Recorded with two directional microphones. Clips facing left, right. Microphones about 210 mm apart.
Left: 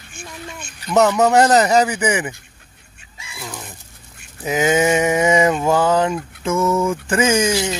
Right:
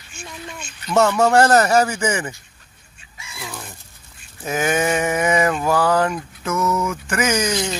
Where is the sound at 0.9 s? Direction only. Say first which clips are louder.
Left 1 dB; 15° left (ahead or behind).